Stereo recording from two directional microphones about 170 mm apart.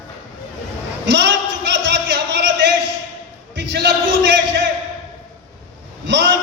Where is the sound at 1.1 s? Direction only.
90° right.